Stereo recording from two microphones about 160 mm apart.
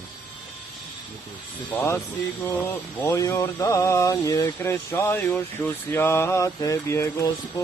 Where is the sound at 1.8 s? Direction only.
15° left (ahead or behind).